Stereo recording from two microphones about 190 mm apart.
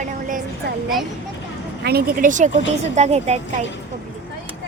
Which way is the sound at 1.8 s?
55° right (ahead or behind).